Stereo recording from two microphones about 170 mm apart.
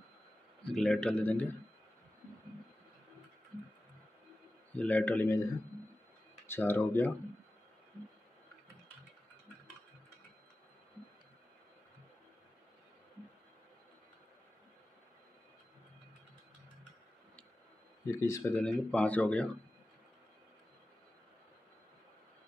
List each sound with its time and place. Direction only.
0.7 s speech: centre (ahead or behind)
4.7 s speech: 10° left (ahead or behind)
6.5 s speech: 10° left (ahead or behind)
18.1 s speech: 15° left (ahead or behind)
18.6 s speech: 5° left (ahead or behind)